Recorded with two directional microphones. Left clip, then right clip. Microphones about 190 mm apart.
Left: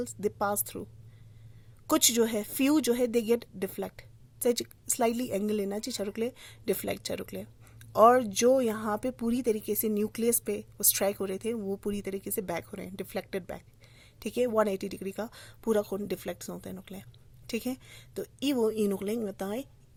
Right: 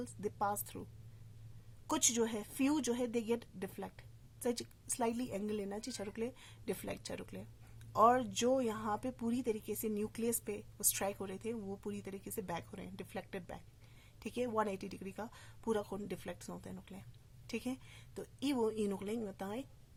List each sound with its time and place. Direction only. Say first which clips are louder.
0.0 s speech: left 8 dB; 30° left (ahead or behind)
1.9 s speech: left 9 dB; 30° left (ahead or behind)